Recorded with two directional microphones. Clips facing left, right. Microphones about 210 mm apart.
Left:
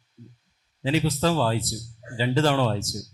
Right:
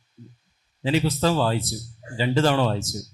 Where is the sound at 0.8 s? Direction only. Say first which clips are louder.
Right 1 dB; 10° right (ahead or behind).